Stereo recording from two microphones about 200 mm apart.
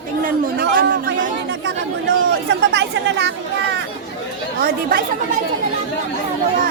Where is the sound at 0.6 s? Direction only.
50° right (ahead or behind).